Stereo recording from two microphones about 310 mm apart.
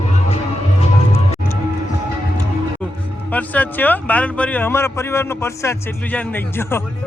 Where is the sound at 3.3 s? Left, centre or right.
Centre.